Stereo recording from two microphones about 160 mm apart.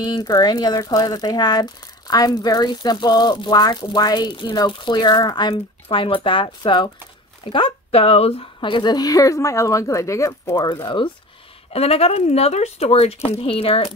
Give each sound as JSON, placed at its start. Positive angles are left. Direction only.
{"t": 0.0, "sound": "speech", "side_deg": 25}
{"t": 11.7, "sound": "speech", "side_deg": 40}